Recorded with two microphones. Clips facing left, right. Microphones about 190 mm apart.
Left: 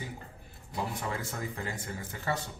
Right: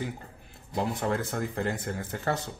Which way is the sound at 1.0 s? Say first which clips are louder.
Right 7 dB; 60° right (ahead or behind).